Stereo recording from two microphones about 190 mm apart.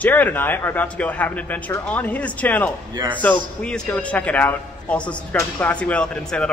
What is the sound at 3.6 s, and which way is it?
Speech, 5° left (ahead or behind).